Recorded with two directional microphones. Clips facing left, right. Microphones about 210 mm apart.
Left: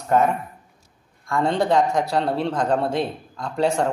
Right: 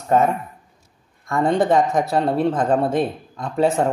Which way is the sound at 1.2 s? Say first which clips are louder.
Right 3 dB; 20° right (ahead or behind).